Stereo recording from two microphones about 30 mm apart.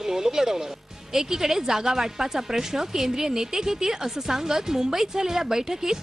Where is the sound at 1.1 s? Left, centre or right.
Centre.